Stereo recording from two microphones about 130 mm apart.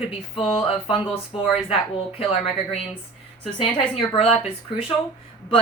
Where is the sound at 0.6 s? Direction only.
45° left (ahead or behind).